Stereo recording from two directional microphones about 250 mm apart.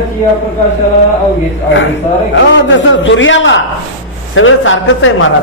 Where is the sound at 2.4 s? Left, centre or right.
Left.